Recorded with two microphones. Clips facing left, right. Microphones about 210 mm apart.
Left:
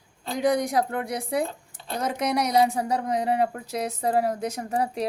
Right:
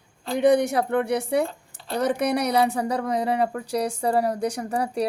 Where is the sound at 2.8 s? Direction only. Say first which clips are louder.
Right 1 dB; 35° right (ahead or behind).